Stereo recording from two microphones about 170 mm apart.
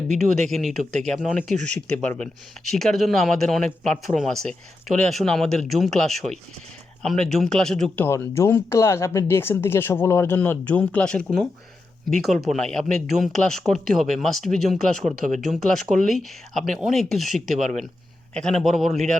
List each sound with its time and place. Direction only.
0.1 s speech: 45° right (ahead or behind)
0.5 s speech: centre (ahead or behind)
12.5 s speech: 5° left (ahead or behind)
17.6 s speech: 45° right (ahead or behind)
18.3 s speech: 5° left (ahead or behind)